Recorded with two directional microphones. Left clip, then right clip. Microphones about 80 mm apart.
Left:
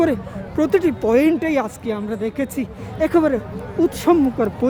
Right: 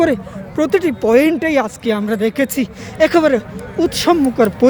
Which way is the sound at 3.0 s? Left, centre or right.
Right.